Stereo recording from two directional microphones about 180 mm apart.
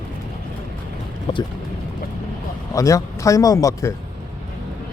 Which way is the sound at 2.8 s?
20° left (ahead or behind).